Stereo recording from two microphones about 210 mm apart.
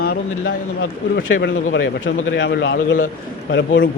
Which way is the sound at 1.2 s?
50° left (ahead or behind).